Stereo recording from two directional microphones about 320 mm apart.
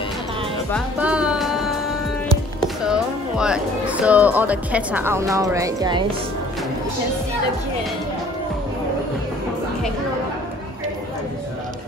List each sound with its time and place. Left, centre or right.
0.7 s music: centre
2.8 s speech: centre